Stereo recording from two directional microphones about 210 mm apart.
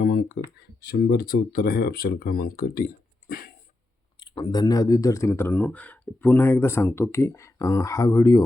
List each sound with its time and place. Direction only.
0.0 s a sound: 45° left (ahead or behind)
0.8 s speech: 50° left (ahead or behind)
4.2 s speech: 20° left (ahead or behind)